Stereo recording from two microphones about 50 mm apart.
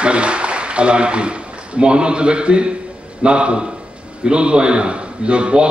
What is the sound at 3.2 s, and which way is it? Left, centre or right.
A man's voice, centre.